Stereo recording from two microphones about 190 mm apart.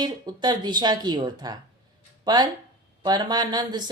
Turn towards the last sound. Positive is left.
turn(degrees=-20)  # may be behind; listen again after turning